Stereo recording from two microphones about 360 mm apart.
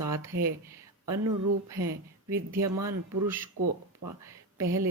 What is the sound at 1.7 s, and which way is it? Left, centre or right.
Speech, centre.